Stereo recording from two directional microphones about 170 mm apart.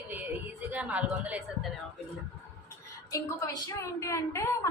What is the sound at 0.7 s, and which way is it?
Speech, 10° right (ahead or behind).